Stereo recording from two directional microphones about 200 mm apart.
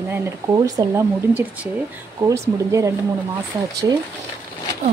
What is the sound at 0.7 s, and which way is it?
Speech, 15° right (ahead or behind).